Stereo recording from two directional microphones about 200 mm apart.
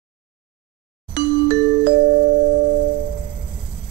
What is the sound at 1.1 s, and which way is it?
Music, 55° right (ahead or behind).